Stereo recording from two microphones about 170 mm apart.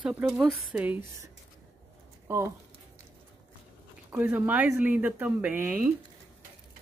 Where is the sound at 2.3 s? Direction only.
15° right (ahead or behind).